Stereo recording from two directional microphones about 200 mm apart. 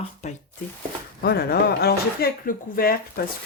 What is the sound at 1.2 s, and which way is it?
Speech, 50° left (ahead or behind).